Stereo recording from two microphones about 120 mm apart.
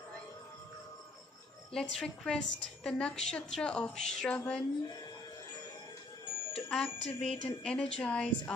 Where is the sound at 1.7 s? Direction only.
5° left (ahead or behind).